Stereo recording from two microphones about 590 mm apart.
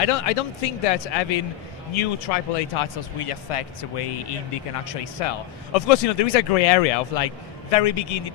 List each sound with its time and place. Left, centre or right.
0.0 s speech: left
2.7 s speech: left